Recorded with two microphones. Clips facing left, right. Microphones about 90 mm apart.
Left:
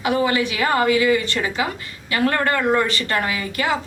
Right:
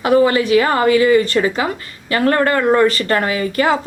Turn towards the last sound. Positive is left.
turn(degrees=-40)  # may be behind; listen again after turning